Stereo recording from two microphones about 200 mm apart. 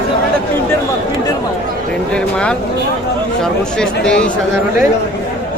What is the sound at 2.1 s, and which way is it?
Speech, 5° left (ahead or behind).